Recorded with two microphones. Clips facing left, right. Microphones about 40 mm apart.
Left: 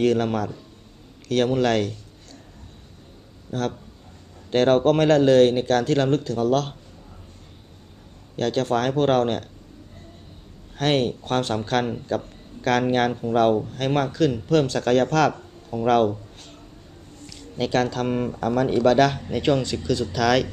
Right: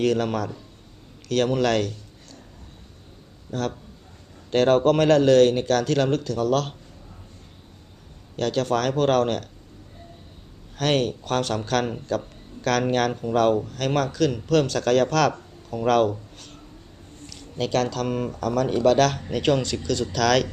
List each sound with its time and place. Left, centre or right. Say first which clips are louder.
0.0 s speech: left 2 dB; centre
3.5 s speech: left 1 dB; centre
8.4 s speech: left 1 dB; centre
10.8 s speech: left 1 dB; centre
15.9 s a sound: left 1 dB; centre
17.2 s speech: left 1 dB; centre
18.8 s speech: left 1 dB; centre